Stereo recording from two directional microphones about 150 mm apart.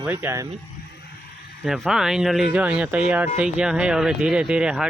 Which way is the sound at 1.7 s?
Centre (ahead or behind).